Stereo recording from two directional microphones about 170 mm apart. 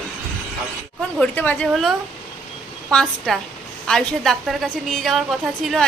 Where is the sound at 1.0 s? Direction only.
5° left (ahead or behind).